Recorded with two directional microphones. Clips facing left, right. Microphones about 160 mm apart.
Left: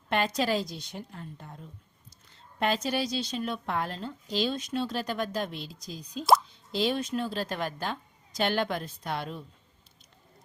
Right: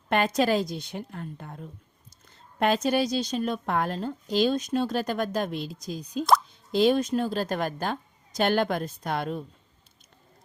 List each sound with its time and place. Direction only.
0.3 s a woman's voice: 50° right (ahead or behind)
2.6 s speech: 50° right (ahead or behind)